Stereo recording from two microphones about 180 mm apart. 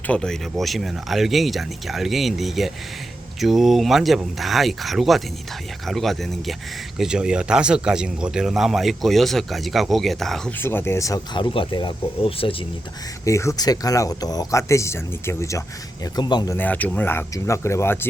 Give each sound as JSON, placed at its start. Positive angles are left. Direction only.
{"t": 0.1, "sound": "speech", "side_deg": 5}
{"t": 10.6, "sound": "speech", "side_deg": 10}
{"t": 13.2, "sound": "speech", "side_deg": 15}
{"t": 16.6, "sound": "speech", "side_deg": 10}